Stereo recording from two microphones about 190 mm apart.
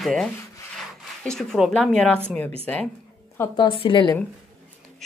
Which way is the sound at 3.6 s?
25° left (ahead or behind).